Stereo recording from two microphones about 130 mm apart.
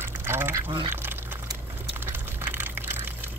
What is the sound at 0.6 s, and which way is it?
Speech, 40° right (ahead or behind).